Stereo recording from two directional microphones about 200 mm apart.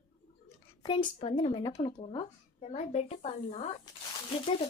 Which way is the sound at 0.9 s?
25° left (ahead or behind).